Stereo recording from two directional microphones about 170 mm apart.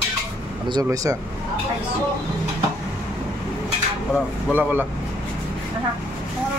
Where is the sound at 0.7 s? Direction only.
20° right (ahead or behind).